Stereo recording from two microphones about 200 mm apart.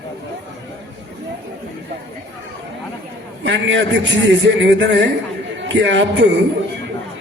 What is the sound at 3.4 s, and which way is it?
A man's voice, 65° right (ahead or behind).